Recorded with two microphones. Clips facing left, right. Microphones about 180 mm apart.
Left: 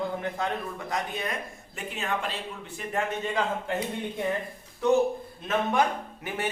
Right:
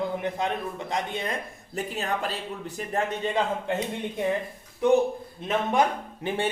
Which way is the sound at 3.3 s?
20° right (ahead or behind).